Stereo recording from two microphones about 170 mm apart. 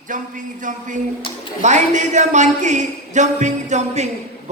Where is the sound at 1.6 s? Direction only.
45° right (ahead or behind).